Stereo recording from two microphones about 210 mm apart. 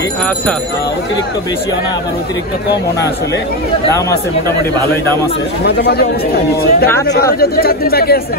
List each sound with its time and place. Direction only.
5.6 s speech: 50° left (ahead or behind)